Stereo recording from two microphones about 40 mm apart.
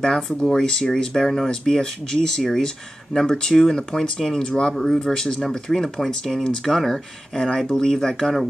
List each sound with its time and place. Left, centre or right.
0.4 s speech: centre
4.7 s speech: centre